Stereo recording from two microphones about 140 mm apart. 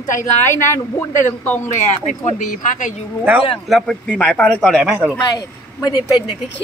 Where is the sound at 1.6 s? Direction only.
55° left (ahead or behind).